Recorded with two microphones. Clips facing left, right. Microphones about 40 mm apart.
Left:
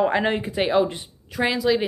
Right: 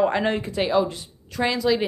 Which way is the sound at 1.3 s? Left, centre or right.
Centre.